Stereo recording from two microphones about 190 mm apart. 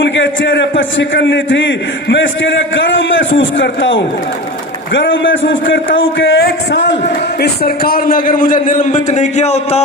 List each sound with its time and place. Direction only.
0.0 s a man's voice: 70° left (ahead or behind)
7.4 s a man's voice: 55° left (ahead or behind); by 9.8 s 35° left (ahead or behind)